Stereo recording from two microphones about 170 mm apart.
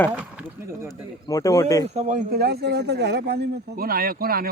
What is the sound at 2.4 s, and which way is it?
Speech, 70° right (ahead or behind).